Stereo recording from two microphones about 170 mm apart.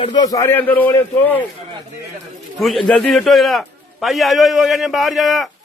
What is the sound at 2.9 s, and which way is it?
A man's voice, 5° left (ahead or behind).